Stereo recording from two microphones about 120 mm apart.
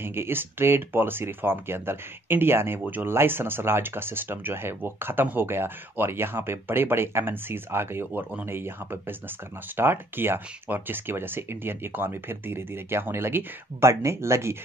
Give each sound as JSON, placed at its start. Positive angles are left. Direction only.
{"t": 0.0, "sound": "speech", "side_deg": -20}